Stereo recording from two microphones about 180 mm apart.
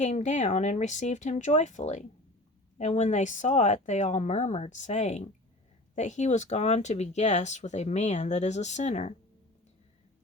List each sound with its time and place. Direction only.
0.0 s speech: 40° left (ahead or behind)